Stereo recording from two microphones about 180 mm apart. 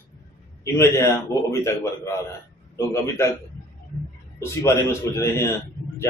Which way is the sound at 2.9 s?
15° left (ahead or behind).